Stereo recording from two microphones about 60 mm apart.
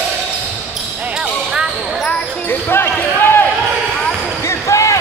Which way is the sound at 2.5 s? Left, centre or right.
Left.